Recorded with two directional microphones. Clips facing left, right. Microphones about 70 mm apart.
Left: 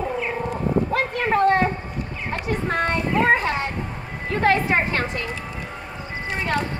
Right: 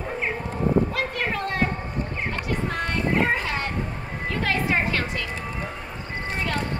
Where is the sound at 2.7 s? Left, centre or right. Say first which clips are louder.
Left 4 dB; left.